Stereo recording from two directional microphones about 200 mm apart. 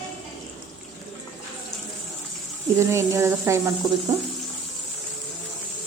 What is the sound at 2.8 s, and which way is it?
Speech, 15° right (ahead or behind).